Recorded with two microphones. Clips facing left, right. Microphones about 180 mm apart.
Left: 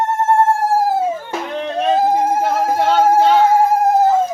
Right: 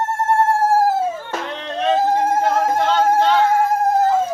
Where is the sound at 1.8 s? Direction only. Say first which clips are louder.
Left 2 dB; 10° left (ahead or behind).